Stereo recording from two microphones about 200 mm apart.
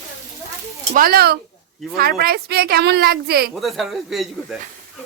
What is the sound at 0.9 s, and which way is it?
A woman's voice, 50° right (ahead or behind).